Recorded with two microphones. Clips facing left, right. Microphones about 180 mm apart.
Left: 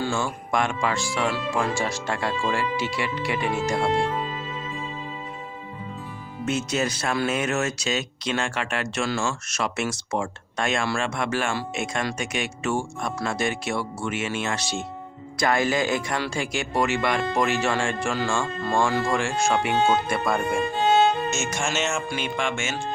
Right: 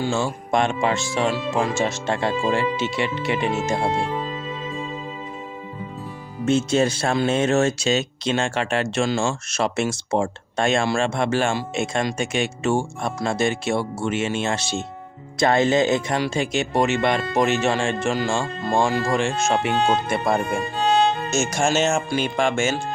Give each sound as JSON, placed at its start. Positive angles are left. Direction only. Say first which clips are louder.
{"t": 0.0, "sound": "speech", "louder": "right 3 dB", "side_deg": -25}
{"t": 6.4, "sound": "speech", "louder": "right 6 dB", "side_deg": -30}
{"t": 20.7, "sound": "music", "louder": "right 1 dB", "side_deg": 20}
{"t": 21.2, "sound": "speech", "louder": "right 5 dB", "side_deg": -35}